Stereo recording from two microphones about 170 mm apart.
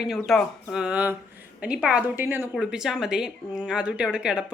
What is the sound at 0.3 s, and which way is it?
A woman's voice, centre (ahead or behind).